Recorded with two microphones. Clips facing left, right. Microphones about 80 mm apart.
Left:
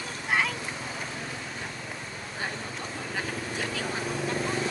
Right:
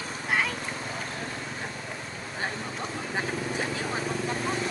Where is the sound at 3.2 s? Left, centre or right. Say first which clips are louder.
Right 3 dB; right.